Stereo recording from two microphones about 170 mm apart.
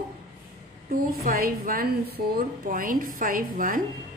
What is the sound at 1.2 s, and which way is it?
A woman's voice, 55° right (ahead or behind).